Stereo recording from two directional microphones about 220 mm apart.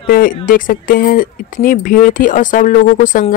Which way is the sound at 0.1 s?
40° left (ahead or behind).